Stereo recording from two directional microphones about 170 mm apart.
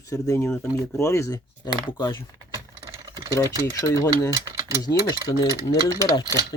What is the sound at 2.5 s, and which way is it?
Typing, 20° right (ahead or behind).